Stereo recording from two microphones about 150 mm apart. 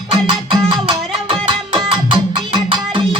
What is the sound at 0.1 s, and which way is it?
Music, 30° right (ahead or behind).